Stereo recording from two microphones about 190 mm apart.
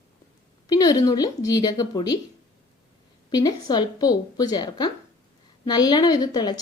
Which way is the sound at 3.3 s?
20° left (ahead or behind).